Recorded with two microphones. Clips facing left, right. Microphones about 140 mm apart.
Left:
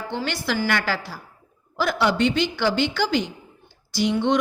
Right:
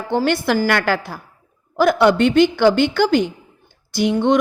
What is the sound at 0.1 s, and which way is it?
A woman's voice, 50° right (ahead or behind).